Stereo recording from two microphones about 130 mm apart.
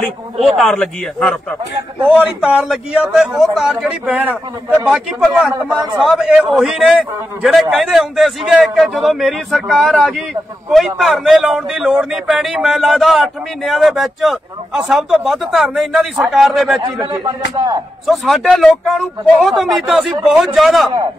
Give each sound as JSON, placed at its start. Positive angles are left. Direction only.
{"t": 0.4, "sound": "a man's voice", "side_deg": 0}
{"t": 2.0, "sound": "a man's voice", "side_deg": -5}
{"t": 17.1, "sound": "speech", "side_deg": -30}
{"t": 18.0, "sound": "a man's voice", "side_deg": 0}